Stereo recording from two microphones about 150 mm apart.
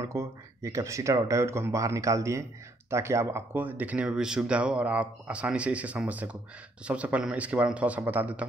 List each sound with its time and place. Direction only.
0.0 s speech: 20° right (ahead or behind)